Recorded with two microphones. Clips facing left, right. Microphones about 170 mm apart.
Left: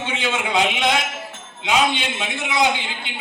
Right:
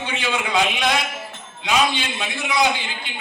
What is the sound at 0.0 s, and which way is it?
A man's voice, 20° left (ahead or behind).